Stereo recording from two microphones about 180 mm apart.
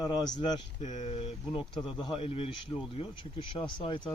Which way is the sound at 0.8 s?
40° left (ahead or behind).